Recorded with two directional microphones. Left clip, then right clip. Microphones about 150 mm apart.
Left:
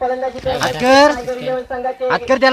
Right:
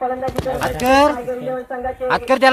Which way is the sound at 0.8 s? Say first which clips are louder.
Left 3 dB; 40° left (ahead or behind).